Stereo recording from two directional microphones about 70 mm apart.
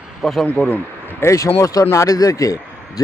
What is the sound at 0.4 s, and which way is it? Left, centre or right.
Speech, centre.